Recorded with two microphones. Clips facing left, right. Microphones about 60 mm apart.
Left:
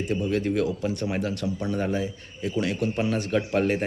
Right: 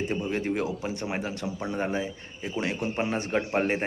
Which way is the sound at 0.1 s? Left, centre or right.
Right.